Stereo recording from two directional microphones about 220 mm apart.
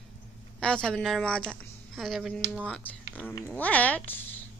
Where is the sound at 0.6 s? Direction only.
5° left (ahead or behind).